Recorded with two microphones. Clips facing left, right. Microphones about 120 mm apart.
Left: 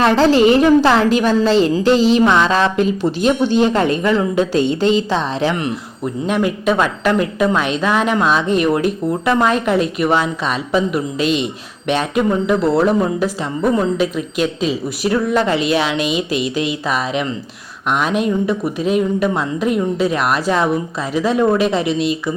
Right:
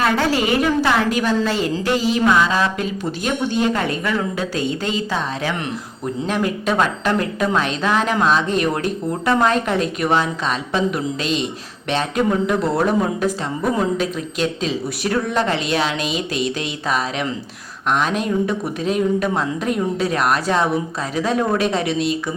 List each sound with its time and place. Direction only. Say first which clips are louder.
0.0 s a woman's voice: left 7 dB; 25° left (ahead or behind)
6.2 s speech: left 4 dB; 5° left (ahead or behind)